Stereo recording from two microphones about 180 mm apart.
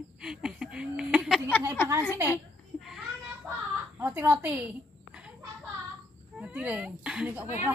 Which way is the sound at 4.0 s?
10° right (ahead or behind).